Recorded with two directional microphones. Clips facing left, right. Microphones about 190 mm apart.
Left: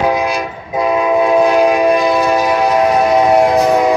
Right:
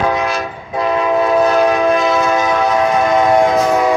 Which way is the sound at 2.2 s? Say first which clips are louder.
Left 2 dB; 15° left (ahead or behind).